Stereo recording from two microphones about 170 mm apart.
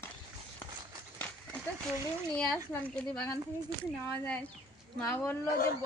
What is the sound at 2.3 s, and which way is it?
A woman's voice, 5° left (ahead or behind).